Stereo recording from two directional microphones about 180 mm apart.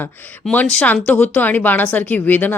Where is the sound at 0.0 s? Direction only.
10° left (ahead or behind).